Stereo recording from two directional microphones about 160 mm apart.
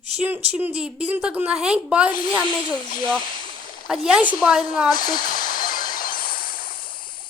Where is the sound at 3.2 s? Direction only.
55° left (ahead or behind).